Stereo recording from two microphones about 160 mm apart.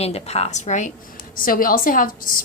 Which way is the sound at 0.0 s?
40° left (ahead or behind).